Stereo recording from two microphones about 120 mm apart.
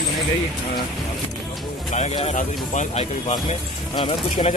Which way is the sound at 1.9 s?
65° left (ahead or behind).